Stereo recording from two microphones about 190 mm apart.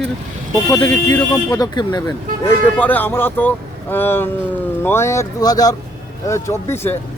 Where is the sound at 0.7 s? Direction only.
15° left (ahead or behind).